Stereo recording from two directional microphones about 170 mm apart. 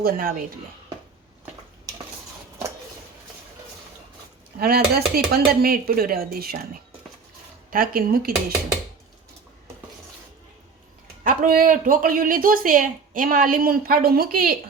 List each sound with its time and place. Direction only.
0.0 s speech: 55° right (ahead or behind)
4.6 s speech: 65° right (ahead or behind)
11.2 s speech: 55° right (ahead or behind)